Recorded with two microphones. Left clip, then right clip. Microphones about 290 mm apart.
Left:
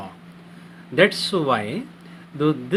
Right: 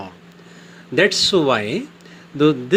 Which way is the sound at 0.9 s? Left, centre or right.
Right.